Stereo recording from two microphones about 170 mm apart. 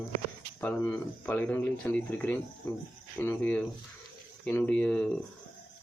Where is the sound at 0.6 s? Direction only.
10° left (ahead or behind).